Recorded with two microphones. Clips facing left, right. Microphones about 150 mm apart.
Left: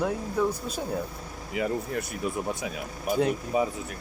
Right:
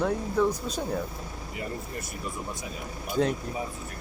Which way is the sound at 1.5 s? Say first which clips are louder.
Left 8 dB; 90° left.